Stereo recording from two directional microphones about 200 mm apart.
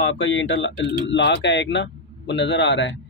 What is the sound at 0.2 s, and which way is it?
A man's voice, 70° left (ahead or behind).